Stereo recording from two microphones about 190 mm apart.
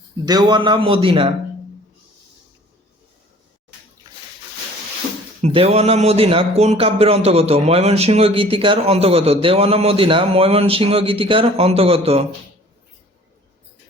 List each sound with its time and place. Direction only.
0.3 s a man's voice: 20° right (ahead or behind)
5.4 s speech: 30° right (ahead or behind)